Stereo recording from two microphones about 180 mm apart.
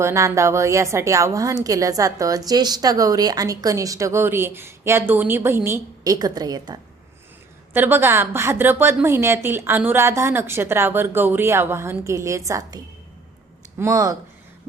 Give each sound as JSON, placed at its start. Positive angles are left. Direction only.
{"t": 0.0, "sound": "a woman's voice", "side_deg": -15}